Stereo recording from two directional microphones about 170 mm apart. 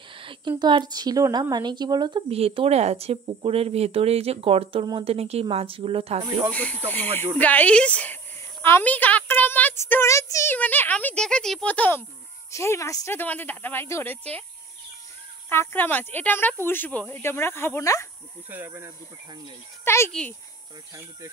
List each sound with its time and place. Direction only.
0.1 s a woman's voice: 30° right (ahead or behind)
7.3 s speech: 10° left (ahead or behind)
15.5 s speech: 10° left (ahead or behind)
18.5 s speech: 10° right (ahead or behind)
19.8 s speech: 15° left (ahead or behind)